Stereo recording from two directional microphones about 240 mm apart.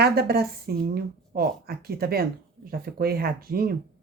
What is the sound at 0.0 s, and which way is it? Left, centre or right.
Speech, right.